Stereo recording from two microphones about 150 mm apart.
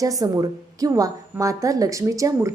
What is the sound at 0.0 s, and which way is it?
A woman's voice, 25° right (ahead or behind).